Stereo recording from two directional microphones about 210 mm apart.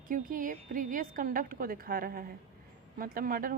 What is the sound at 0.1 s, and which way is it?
A woman's voice, 40° right (ahead or behind).